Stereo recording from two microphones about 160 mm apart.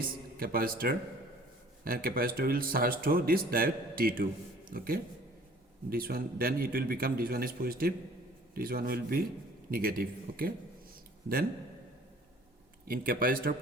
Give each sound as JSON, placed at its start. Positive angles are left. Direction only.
{"t": 0.0, "sound": "a man's voice", "side_deg": -65}
{"t": 5.9, "sound": "a man's voice", "side_deg": -70}
{"t": 12.9, "sound": "a man's voice", "side_deg": -65}